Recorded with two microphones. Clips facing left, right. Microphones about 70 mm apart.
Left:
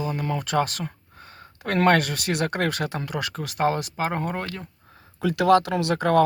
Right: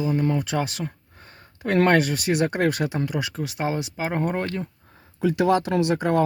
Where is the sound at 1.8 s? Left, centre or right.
Centre.